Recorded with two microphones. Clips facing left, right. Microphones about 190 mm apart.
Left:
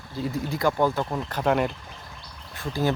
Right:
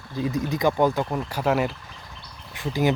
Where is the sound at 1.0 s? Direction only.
5° right (ahead or behind).